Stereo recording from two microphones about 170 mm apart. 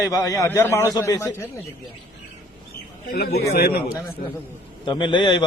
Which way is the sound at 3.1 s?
65° left (ahead or behind).